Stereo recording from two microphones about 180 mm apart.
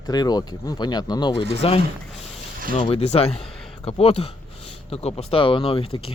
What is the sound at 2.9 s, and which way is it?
Speech, 35° left (ahead or behind).